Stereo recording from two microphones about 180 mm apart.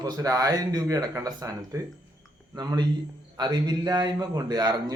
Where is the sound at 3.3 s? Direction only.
20° right (ahead or behind).